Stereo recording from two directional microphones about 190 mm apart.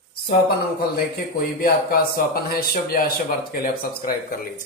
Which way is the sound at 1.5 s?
50° left (ahead or behind).